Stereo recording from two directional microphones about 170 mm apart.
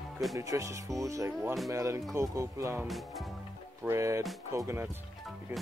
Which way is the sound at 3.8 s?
15° right (ahead or behind).